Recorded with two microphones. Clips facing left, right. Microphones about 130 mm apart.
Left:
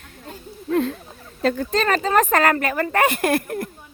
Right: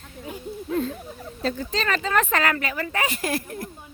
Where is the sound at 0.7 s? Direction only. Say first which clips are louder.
Left 5 dB; 75° left (ahead or behind).